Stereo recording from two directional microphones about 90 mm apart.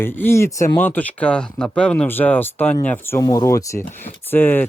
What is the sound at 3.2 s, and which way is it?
Speech, 40° left (ahead or behind).